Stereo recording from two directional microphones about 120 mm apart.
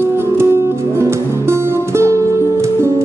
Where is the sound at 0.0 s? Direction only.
20° right (ahead or behind).